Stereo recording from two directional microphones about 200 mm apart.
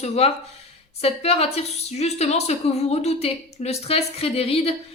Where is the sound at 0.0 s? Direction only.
30° left (ahead or behind).